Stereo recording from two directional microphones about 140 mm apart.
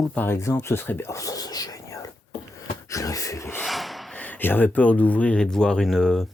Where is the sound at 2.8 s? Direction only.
25° left (ahead or behind).